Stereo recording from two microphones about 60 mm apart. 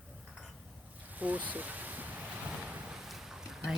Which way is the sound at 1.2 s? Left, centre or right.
Right.